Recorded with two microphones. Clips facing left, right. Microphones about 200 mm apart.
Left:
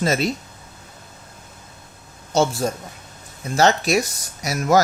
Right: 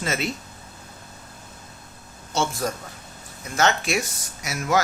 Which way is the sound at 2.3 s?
40° left (ahead or behind).